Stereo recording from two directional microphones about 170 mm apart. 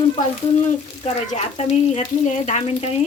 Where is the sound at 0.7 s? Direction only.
45° left (ahead or behind).